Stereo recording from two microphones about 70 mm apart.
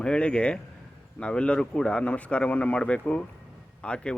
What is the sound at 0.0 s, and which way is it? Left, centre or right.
Speech, centre.